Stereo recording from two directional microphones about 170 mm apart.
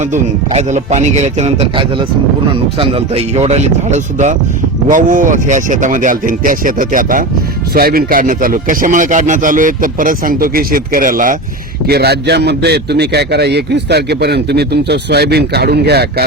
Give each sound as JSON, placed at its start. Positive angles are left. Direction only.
{"t": 0.0, "sound": "a man's voice", "side_deg": -45}
{"t": 11.9, "sound": "a man's voice", "side_deg": -70}